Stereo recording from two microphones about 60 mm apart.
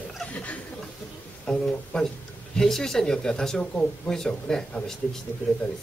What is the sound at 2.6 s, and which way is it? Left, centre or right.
Speech, centre.